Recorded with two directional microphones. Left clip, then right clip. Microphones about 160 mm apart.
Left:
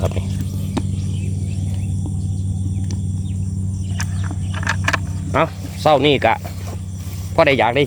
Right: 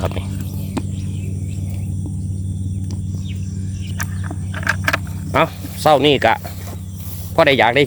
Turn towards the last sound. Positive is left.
turn(degrees=-20)  # may be behind; listen again after turning